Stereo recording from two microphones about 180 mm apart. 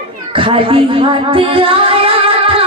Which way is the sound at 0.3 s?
30° right (ahead or behind).